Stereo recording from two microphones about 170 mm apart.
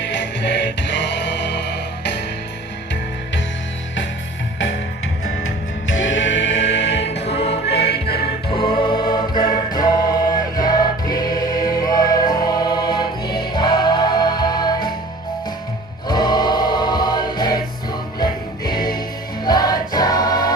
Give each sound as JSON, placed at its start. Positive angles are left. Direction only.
{"t": 0.0, "sound": "music", "side_deg": 90}
{"t": 6.0, "sound": "music", "side_deg": 90}
{"t": 7.1, "sound": "music", "side_deg": 35}
{"t": 7.7, "sound": "music", "side_deg": 75}
{"t": 8.4, "sound": "music", "side_deg": 30}
{"t": 16.0, "sound": "choir", "side_deg": 25}
{"t": 18.2, "sound": "music", "side_deg": 25}
{"t": 19.5, "sound": "choir", "side_deg": 25}